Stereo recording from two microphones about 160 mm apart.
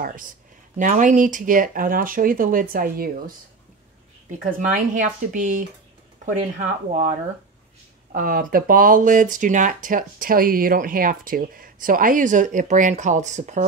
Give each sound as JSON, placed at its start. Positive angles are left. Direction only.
{"t": 0.0, "sound": "speech", "side_deg": -60}
{"t": 4.3, "sound": "speech", "side_deg": -55}